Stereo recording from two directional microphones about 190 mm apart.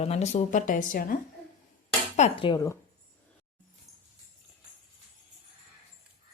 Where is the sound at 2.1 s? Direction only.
35° left (ahead or behind).